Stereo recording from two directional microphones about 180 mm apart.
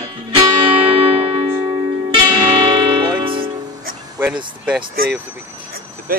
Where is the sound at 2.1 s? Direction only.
25° right (ahead or behind).